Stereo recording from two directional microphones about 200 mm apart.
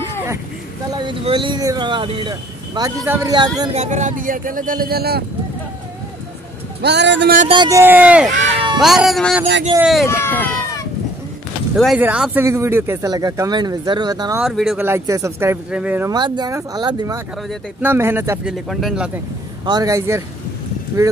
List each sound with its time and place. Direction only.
0.9 s speech: 25° right (ahead or behind)
3.7 s speech: 35° right (ahead or behind); by 5.2 s 50° right (ahead or behind)
6.8 s speech: 60° right (ahead or behind)
7.5 s speech: 20° right (ahead or behind)
8.4 s a sound: 25° right (ahead or behind)
8.7 s speech: centre (ahead or behind)
10.0 s speech: 10° left (ahead or behind)
11.7 s speech: centre (ahead or behind); by 14.4 s 20° right (ahead or behind)
14.4 s speech: centre (ahead or behind)
14.9 s speech: 15° right (ahead or behind)
16.1 s speech: 20° right (ahead or behind); by 19.0 s centre (ahead or behind)
19.6 s speech: 20° right (ahead or behind)